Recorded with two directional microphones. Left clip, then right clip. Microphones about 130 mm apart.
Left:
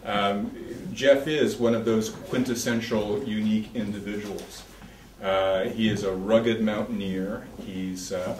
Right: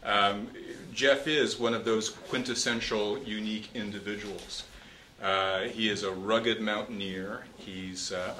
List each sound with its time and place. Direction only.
0.0 s bird: 40° right (ahead or behind)
0.9 s speech: 40° right (ahead or behind)
5.2 s speech: 40° right (ahead or behind)